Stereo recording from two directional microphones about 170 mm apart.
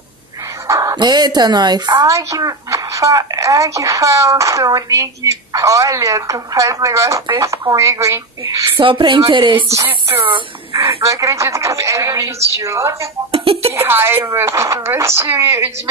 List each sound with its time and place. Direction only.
0.7 s speech: 20° right (ahead or behind)
8.7 s speech: 30° right (ahead or behind)
13.3 s a sound: 35° right (ahead or behind)
13.7 s speech: 15° right (ahead or behind)